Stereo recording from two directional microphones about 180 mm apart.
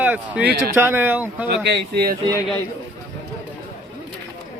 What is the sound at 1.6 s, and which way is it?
Speech, 65° right (ahead or behind).